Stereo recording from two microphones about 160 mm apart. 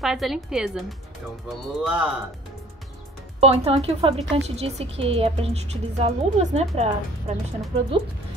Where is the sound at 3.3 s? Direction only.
40° right (ahead or behind).